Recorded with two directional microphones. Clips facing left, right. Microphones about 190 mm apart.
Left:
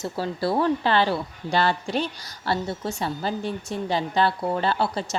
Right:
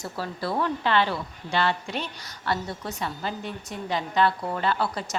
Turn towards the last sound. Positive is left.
turn(degrees=30)  # may be behind; listen again after turning